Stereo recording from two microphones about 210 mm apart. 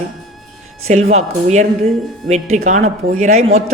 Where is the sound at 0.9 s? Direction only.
30° right (ahead or behind).